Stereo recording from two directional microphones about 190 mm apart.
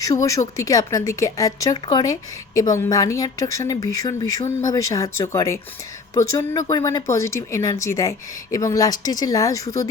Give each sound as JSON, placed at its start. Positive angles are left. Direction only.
{"t": 0.0, "sound": "a woman's voice", "side_deg": 20}